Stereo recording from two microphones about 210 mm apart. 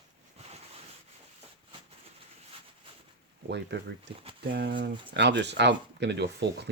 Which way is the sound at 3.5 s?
55° right (ahead or behind).